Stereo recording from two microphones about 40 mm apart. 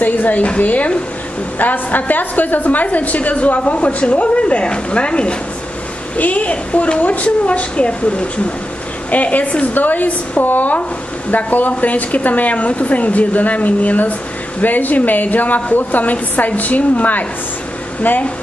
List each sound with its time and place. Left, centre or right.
0.0 s a woman's voice: left
6.1 s a woman's voice: left
9.1 s a woman's voice: left